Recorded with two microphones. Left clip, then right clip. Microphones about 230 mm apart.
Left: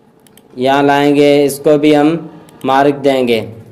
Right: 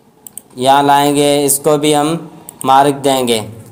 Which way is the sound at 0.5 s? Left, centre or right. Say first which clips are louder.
Right 2 dB; right.